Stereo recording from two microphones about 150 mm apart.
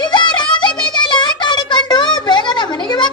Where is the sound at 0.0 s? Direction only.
30° left (ahead or behind).